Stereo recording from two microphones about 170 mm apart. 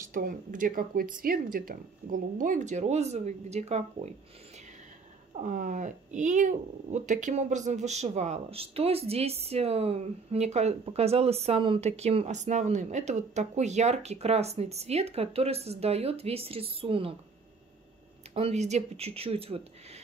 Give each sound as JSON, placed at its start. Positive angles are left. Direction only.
{"t": 0.1, "sound": "speech", "side_deg": -50}
{"t": 5.4, "sound": "speech", "side_deg": -50}
{"t": 18.3, "sound": "speech", "side_deg": -40}